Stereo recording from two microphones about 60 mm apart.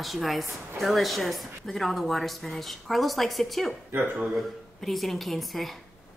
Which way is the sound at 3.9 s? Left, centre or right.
Right.